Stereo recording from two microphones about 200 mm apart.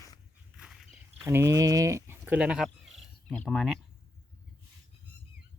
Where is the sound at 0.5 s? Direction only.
Centre (ahead or behind).